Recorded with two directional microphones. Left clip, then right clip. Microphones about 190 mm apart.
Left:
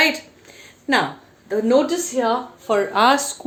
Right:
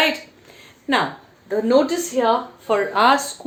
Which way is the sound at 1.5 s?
10° left (ahead or behind).